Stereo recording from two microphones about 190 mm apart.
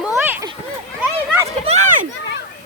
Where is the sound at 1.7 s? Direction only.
40° right (ahead or behind).